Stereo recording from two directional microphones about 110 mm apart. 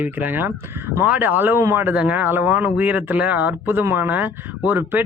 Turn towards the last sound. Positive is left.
turn(degrees=-15)  # may be behind; listen again after turning